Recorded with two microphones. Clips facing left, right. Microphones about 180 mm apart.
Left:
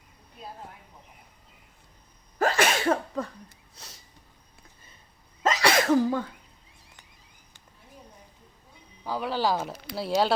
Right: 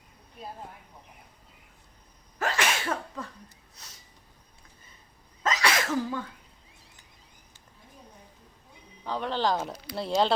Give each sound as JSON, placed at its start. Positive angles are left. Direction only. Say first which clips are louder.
{"t": 2.4, "sound": "sneeze", "louder": "left 5 dB", "side_deg": 40}
{"t": 5.4, "sound": "sneeze", "louder": "left 4 dB", "side_deg": 30}
{"t": 5.9, "sound": "cough", "louder": "left 7 dB", "side_deg": 45}
{"t": 9.0, "sound": "a sound", "louder": "left 1 dB", "side_deg": 5}
{"t": 9.6, "sound": "speech", "louder": "left 1 dB", "side_deg": 0}